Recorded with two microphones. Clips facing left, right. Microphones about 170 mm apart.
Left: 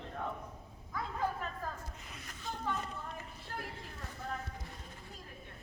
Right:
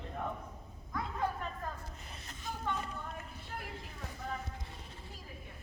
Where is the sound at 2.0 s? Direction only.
30° right (ahead or behind).